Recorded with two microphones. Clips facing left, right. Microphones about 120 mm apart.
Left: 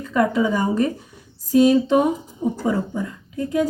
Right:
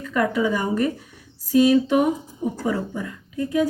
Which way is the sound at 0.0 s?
25° left (ahead or behind).